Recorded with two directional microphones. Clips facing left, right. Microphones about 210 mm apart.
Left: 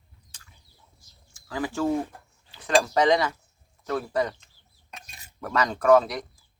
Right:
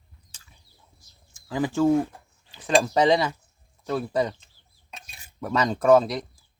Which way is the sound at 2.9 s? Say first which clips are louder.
Right 1 dB; 25° right (ahead or behind).